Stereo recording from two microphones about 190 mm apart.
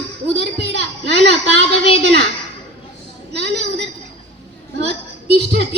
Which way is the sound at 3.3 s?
60° right (ahead or behind).